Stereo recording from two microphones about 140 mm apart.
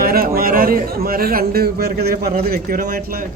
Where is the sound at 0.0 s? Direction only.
90° right.